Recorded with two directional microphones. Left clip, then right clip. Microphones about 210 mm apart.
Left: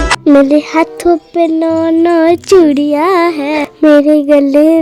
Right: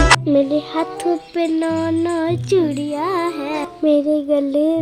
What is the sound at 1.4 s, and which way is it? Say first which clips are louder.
Speech: left 8 dB; 25° left (ahead or behind).